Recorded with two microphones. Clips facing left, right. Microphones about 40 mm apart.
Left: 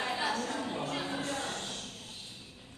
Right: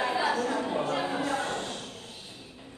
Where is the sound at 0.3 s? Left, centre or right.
Centre.